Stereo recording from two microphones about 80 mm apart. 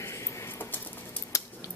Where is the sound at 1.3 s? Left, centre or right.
Left.